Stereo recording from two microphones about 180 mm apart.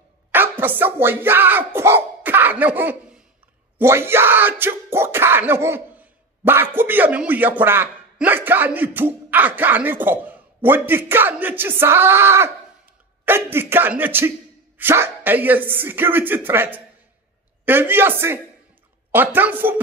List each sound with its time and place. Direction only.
0.3 s speech: 10° right (ahead or behind)